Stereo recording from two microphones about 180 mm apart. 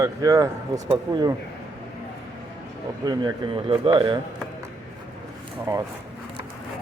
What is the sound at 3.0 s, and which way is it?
Speech, 25° right (ahead or behind).